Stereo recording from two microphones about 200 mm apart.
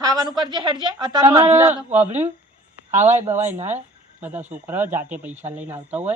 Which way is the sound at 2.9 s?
35° right (ahead or behind).